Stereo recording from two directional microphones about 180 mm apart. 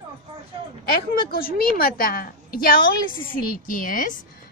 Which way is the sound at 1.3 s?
55° left (ahead or behind).